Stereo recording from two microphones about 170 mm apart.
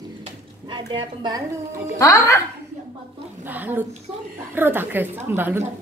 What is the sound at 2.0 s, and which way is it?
Speech, 20° left (ahead or behind).